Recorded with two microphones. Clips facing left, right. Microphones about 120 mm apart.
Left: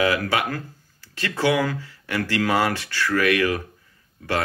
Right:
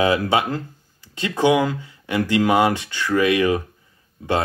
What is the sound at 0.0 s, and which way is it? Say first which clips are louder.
Speech: right 3 dB; 25° right (ahead or behind).